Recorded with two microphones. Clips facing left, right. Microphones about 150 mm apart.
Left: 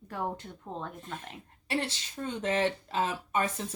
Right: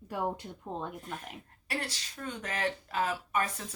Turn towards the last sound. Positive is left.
turn(degrees=25)  # may be behind; listen again after turning